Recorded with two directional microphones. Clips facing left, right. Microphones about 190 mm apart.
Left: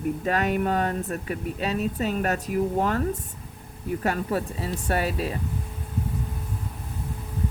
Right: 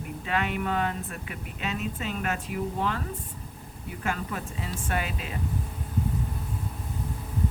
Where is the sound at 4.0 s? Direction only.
35° left (ahead or behind).